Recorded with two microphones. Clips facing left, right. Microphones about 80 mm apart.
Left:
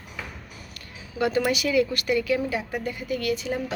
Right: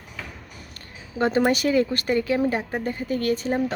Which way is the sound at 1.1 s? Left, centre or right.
Right.